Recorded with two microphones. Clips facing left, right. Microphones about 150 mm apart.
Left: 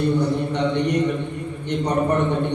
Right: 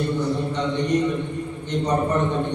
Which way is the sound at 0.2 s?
65° left (ahead or behind).